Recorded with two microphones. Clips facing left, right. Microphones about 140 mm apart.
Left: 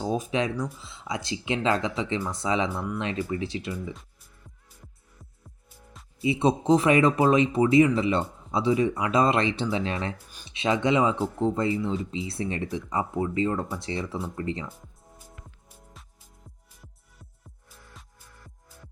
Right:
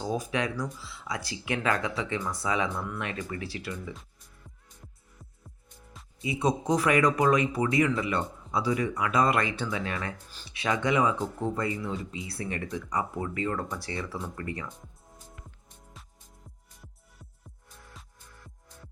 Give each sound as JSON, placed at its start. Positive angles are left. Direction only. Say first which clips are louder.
{"t": 0.0, "sound": "speech", "louder": "left 3 dB", "side_deg": 20}
{"t": 2.6, "sound": "speech", "louder": "left 3 dB", "side_deg": 10}
{"t": 2.9, "sound": "speech", "louder": "left 5 dB", "side_deg": 20}
{"t": 6.2, "sound": "speech", "louder": "left 5 dB", "side_deg": 25}
{"t": 15.7, "sound": "music", "louder": "left 2 dB", "side_deg": 0}